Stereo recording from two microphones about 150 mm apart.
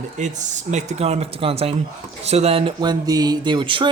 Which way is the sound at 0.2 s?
55° right (ahead or behind).